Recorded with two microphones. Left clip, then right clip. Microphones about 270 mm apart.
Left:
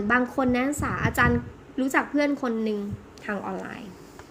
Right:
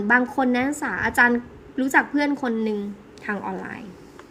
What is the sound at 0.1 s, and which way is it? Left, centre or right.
A woman's voice, centre.